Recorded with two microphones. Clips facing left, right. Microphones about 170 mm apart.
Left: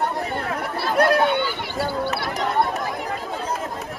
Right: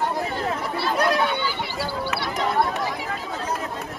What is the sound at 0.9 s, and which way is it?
Run, 55° left (ahead or behind).